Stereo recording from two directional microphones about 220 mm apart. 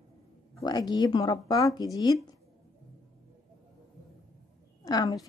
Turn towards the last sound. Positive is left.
turn(degrees=15)  # may be behind; listen again after turning